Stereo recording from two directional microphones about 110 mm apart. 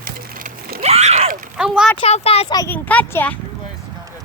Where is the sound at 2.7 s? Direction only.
15° left (ahead or behind).